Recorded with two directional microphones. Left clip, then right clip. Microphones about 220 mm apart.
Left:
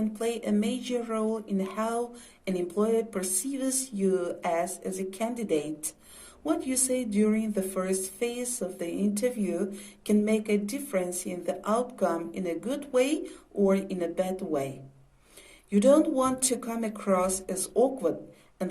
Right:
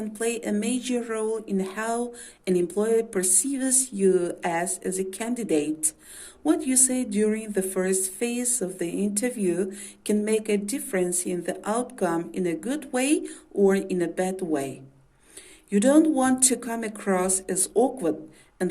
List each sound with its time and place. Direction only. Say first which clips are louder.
0.3 s a woman's voice: right 2 dB; 45° right (ahead or behind)
15.7 s a woman's voice: right 2 dB; 45° right (ahead or behind)